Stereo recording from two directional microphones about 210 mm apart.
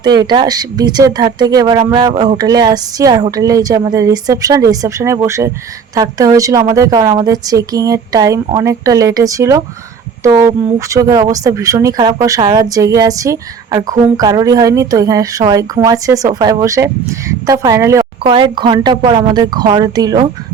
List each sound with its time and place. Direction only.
0.2 s a woman's voice: 20° right (ahead or behind)